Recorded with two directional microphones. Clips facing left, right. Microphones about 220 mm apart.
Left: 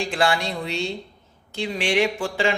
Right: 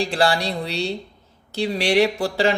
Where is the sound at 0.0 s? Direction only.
35° right (ahead or behind).